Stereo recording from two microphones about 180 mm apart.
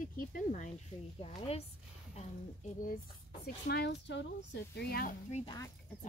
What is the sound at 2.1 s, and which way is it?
Speech, 45° left (ahead or behind).